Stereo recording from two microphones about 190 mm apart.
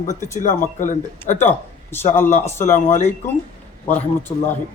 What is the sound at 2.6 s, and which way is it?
Speech, 40° left (ahead or behind).